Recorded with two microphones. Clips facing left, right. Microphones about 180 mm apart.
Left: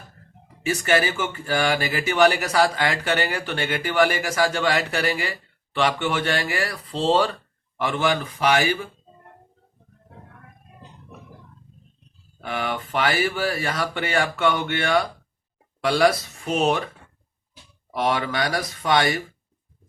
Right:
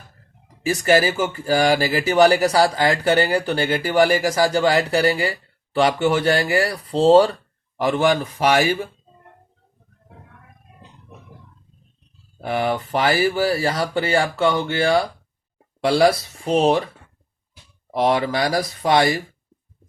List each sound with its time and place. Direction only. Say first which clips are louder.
0.6 s speech: right 4 dB; 35° right (ahead or behind)
12.4 s speech: right 6 dB; 35° right (ahead or behind)
17.9 s speech: right 4 dB; 35° right (ahead or behind)